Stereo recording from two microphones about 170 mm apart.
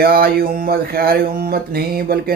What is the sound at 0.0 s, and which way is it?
Speech, 60° right (ahead or behind).